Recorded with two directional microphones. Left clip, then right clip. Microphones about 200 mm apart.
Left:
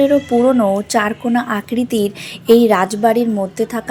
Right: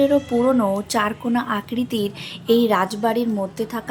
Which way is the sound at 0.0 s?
15° left (ahead or behind).